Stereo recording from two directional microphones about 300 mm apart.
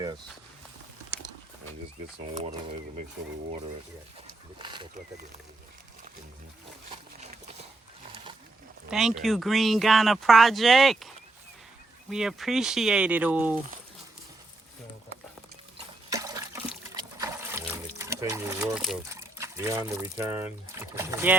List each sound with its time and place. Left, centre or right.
2.3 s speech: centre
4.5 s speech: centre
8.9 s speech: centre
12.1 s speech: centre
16.0 s trickle: centre